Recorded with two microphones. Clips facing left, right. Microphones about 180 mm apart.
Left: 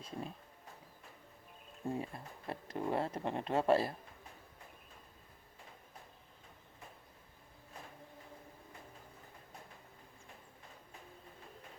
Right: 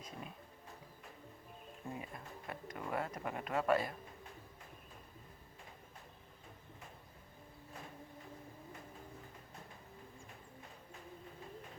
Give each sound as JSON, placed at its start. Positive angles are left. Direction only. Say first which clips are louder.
{"t": 0.0, "sound": "speech", "louder": "left 5 dB", "side_deg": 30}
{"t": 2.0, "sound": "speech", "louder": "left 5 dB", "side_deg": 30}